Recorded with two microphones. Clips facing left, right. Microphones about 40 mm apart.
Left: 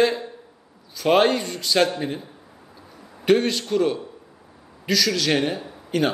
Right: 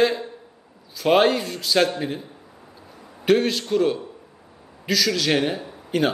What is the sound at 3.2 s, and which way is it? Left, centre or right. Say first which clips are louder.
A man's voice: even; centre.